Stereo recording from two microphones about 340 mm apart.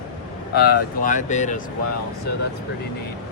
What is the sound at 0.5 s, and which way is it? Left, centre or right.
Speech, left.